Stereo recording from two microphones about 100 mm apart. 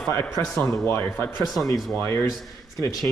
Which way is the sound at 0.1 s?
30° left (ahead or behind).